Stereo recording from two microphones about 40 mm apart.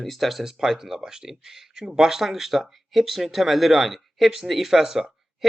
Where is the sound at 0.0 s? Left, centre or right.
Centre.